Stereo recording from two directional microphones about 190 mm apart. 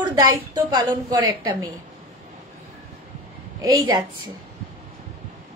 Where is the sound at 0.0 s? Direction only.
20° right (ahead or behind).